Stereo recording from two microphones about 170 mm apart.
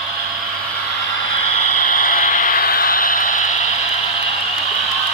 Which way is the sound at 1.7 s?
50° left (ahead or behind).